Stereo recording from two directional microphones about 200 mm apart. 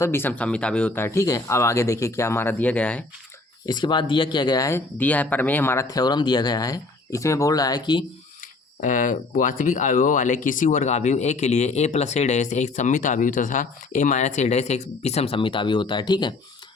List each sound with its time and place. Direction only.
0.0 s speech: 10° left (ahead or behind)
3.7 s speech: 20° left (ahead or behind)
8.8 s speech: 40° left (ahead or behind); by 16.3 s 20° left (ahead or behind)